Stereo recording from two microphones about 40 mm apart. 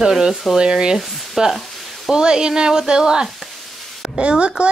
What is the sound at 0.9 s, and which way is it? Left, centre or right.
Speech, centre.